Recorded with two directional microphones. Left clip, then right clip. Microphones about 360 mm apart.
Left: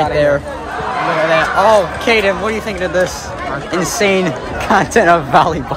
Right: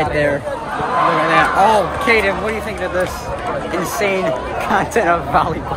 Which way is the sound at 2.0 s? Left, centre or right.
Centre.